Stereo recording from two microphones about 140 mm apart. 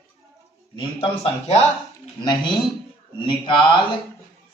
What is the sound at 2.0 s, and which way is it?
Speech, 35° left (ahead or behind).